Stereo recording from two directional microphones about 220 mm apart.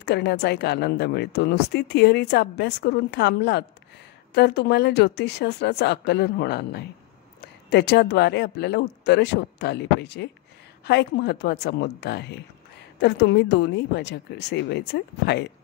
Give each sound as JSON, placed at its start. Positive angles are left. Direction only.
{"t": 0.0, "sound": "a woman's voice", "side_deg": 50}